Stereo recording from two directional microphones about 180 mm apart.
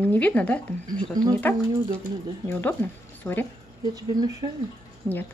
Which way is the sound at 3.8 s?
20° right (ahead or behind).